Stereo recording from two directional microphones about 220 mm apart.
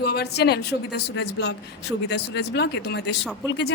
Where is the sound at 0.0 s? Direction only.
45° left (ahead or behind).